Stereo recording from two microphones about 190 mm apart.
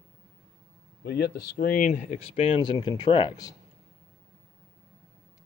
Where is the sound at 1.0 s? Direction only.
55° left (ahead or behind); by 3.6 s 20° left (ahead or behind).